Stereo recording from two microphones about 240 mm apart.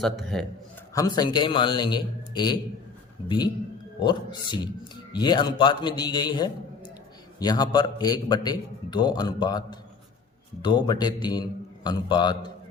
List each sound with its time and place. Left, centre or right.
0.0 s a man's voice: centre
0.9 s a man's voice: centre